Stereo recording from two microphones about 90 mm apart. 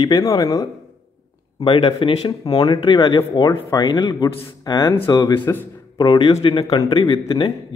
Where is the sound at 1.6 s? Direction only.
70° left (ahead or behind).